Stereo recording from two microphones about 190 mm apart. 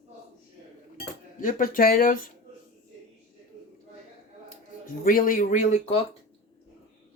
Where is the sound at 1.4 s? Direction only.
45° left (ahead or behind).